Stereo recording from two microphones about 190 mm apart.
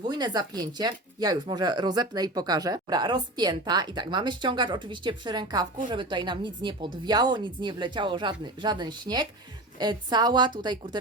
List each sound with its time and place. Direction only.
0.0 s speech: 20° right (ahead or behind)